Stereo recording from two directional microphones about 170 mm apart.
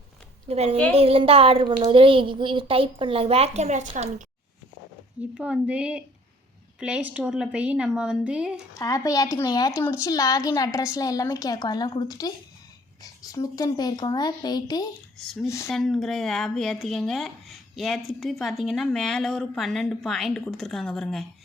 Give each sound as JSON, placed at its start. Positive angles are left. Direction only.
{"t": 0.4, "sound": "a woman's voice", "side_deg": -40}
{"t": 5.3, "sound": "speech", "side_deg": -5}
{"t": 8.8, "sound": "a woman's voice", "side_deg": 20}
{"t": 15.2, "sound": "speech", "side_deg": 0}
{"t": 15.4, "sound": "speech", "side_deg": 15}
{"t": 15.7, "sound": "speech", "side_deg": 0}